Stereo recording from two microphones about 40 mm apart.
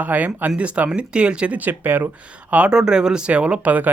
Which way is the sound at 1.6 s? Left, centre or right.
Right.